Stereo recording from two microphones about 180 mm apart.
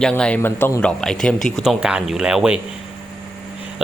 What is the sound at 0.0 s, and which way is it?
Speech, 5° left (ahead or behind).